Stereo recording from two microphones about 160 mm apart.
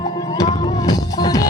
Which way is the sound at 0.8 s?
25° left (ahead or behind).